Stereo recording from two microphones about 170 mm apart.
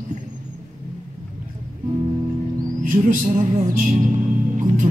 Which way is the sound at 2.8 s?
50° right (ahead or behind).